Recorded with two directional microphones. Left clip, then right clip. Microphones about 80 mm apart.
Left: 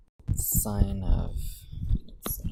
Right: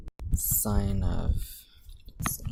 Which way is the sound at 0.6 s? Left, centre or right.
Right.